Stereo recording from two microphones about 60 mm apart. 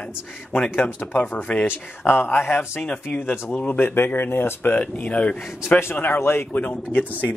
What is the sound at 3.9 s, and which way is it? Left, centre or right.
Speech, left.